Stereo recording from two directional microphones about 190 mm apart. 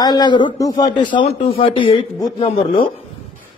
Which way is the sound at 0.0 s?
20° left (ahead or behind).